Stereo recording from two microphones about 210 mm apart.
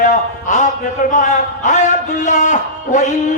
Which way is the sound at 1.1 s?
35° left (ahead or behind).